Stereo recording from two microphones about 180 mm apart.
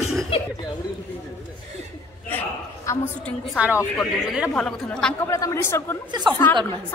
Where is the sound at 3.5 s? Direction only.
10° right (ahead or behind).